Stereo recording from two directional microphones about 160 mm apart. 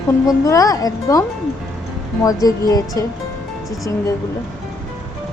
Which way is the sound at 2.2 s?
20° left (ahead or behind).